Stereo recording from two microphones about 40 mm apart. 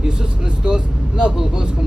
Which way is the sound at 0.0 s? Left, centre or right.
Centre.